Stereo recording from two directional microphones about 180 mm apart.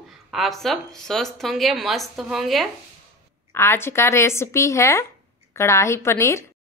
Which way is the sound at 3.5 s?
15° left (ahead or behind).